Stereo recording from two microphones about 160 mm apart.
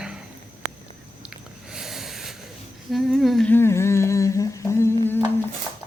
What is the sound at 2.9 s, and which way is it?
Humming, centre (ahead or behind).